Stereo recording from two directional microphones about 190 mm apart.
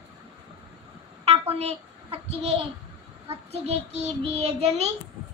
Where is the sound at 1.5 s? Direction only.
30° right (ahead or behind).